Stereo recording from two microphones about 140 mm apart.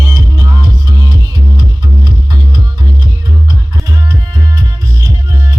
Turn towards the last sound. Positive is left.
turn(degrees=-25)  # may be behind; listen again after turning